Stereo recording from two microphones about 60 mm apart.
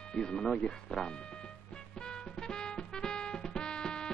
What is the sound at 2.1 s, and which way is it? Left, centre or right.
Music, centre.